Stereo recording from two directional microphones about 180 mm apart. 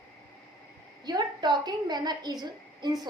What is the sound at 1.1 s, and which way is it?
A woman's voice, 25° right (ahead or behind).